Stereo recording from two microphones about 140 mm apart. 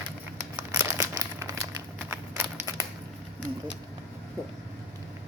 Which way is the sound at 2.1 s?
15° right (ahead or behind).